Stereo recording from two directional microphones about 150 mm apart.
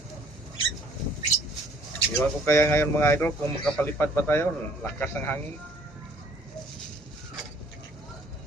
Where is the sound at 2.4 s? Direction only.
15° left (ahead or behind).